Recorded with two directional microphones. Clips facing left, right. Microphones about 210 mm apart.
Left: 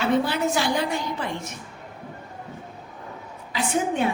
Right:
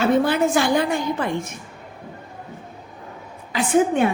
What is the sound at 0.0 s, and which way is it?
A woman's voice, 50° right (ahead or behind).